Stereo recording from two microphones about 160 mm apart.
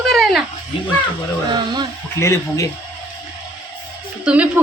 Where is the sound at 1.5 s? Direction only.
25° right (ahead or behind).